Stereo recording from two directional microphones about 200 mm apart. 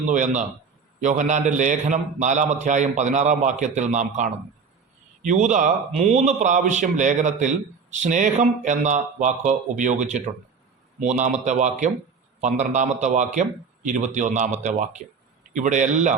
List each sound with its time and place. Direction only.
0.1 s a man's voice: 40° right (ahead or behind)